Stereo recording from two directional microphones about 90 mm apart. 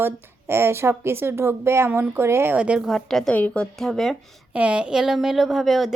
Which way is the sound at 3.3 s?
15° left (ahead or behind).